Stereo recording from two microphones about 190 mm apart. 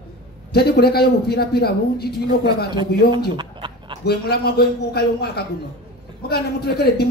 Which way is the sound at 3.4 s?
25° right (ahead or behind).